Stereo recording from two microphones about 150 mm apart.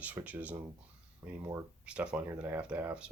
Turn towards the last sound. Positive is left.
turn(degrees=-10)  # may be behind; listen again after turning